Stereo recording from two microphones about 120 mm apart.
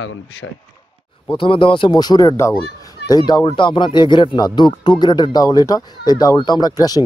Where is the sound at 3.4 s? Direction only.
40° left (ahead or behind).